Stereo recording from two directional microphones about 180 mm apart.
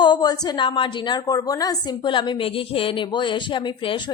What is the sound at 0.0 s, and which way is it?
A woman's voice, 25° left (ahead or behind).